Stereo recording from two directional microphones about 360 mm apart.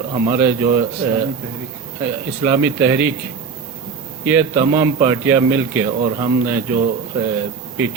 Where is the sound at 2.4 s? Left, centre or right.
Centre.